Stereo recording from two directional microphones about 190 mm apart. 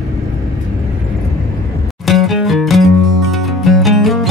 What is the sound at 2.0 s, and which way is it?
Music, centre (ahead or behind).